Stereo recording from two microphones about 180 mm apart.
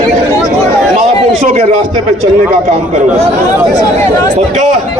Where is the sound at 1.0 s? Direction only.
40° right (ahead or behind).